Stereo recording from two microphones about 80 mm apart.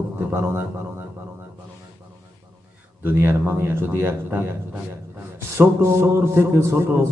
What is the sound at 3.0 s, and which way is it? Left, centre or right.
A man's voice, right.